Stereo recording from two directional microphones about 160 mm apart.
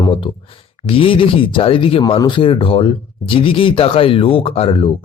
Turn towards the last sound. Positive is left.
turn(degrees=35)  # may be behind; listen again after turning